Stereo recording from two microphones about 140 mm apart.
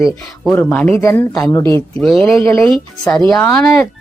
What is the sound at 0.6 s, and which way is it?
Speech, 10° left (ahead or behind).